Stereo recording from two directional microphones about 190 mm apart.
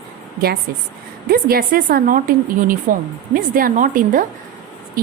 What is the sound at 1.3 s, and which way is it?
A woman's voice, 50° right (ahead or behind).